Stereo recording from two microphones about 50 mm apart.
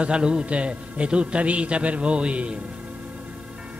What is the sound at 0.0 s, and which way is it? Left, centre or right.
Music, centre.